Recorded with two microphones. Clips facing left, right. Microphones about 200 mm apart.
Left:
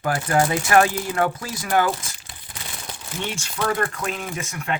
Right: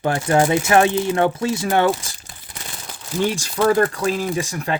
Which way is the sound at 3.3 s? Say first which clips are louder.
Right 6 dB; 35° right (ahead or behind).